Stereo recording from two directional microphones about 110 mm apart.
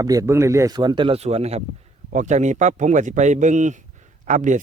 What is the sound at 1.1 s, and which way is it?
Speech, 70° right (ahead or behind).